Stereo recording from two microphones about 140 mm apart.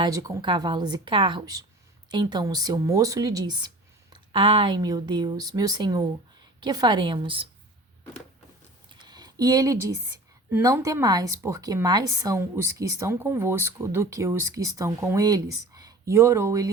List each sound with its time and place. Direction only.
0.0 s a woman's voice: 25° right (ahead or behind)
8.9 s a sound: 30° right (ahead or behind)
10.5 s a woman's voice: 25° right (ahead or behind)